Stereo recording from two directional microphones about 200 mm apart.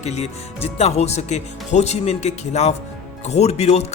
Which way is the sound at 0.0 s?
35° left (ahead or behind).